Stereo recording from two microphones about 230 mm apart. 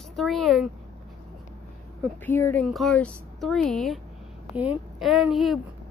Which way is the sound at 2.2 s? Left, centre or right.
Centre.